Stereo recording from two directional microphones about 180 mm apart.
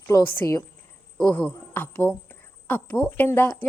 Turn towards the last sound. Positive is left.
turn(degrees=10)  # may be behind; listen again after turning